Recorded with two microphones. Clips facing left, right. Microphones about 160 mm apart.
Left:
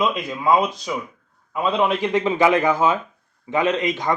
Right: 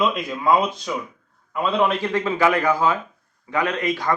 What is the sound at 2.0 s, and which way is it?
A man's voice, 20° left (ahead or behind).